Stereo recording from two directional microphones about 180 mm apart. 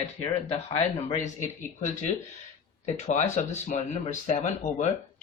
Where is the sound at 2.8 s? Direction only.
40° left (ahead or behind).